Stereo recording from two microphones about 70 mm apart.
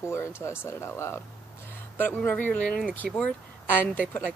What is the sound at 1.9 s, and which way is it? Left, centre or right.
Speech, left.